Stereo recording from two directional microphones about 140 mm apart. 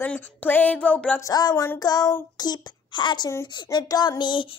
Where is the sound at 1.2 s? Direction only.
25° left (ahead or behind).